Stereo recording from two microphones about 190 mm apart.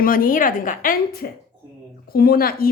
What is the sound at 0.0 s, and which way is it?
A woman's voice, 50° left (ahead or behind).